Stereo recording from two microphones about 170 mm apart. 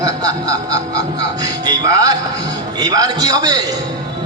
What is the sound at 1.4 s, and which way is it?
A man's voice, 20° right (ahead or behind).